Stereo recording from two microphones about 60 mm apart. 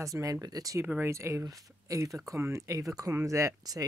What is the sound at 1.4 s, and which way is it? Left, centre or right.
Speech, right.